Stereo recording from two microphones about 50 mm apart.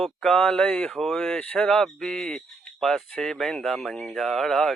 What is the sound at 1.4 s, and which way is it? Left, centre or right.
Speech, left.